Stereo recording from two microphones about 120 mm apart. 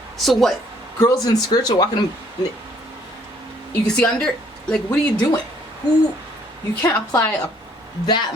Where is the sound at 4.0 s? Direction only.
5° left (ahead or behind).